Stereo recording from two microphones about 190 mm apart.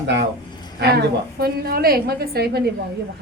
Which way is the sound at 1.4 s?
55° right (ahead or behind).